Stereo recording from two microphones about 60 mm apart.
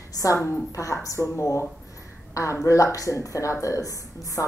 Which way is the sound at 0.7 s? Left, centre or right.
Left.